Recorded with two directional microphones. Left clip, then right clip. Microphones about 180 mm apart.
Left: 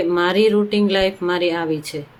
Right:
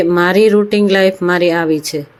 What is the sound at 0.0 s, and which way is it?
Speech, 35° right (ahead or behind).